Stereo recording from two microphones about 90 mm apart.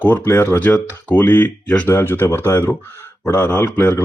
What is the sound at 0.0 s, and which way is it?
Speech, 25° left (ahead or behind).